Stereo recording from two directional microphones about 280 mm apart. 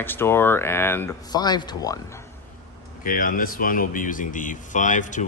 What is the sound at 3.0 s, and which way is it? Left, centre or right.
A man's voice, left.